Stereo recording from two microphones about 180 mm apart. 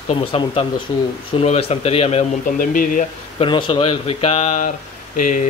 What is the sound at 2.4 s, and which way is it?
Speech, 50° left (ahead or behind).